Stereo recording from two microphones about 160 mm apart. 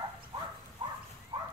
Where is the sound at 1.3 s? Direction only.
30° right (ahead or behind).